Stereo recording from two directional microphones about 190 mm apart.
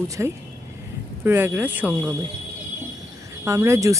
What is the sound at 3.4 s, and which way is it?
Speech, 15° right (ahead or behind).